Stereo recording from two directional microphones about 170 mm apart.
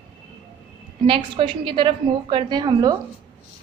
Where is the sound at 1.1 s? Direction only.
30° right (ahead or behind).